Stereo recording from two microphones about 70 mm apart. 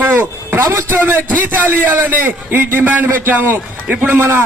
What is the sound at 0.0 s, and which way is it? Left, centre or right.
A man's voice, right.